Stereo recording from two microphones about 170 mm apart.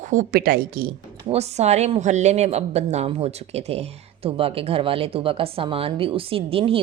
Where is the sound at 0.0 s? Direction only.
50° right (ahead or behind).